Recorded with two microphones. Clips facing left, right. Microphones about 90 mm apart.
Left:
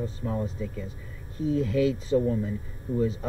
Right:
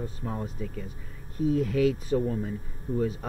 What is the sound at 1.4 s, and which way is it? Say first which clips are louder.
Speech: even; 30° left (ahead or behind).